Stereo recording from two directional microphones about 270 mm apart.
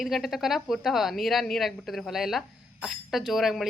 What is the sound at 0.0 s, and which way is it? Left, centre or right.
A woman's voice, centre.